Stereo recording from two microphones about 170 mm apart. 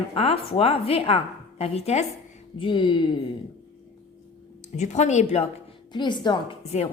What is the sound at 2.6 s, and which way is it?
Speech, 30° left (ahead or behind).